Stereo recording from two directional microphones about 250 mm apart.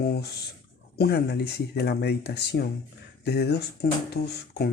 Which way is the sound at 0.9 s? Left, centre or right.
Left.